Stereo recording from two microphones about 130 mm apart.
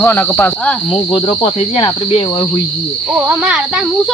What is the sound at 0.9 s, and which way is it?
Speech, 40° left (ahead or behind).